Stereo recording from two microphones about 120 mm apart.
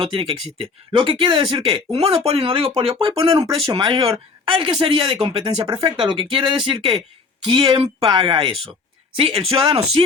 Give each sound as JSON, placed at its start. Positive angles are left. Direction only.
{"t": 0.0, "sound": "speech", "side_deg": -50}
{"t": 3.4, "sound": "speech", "side_deg": -35}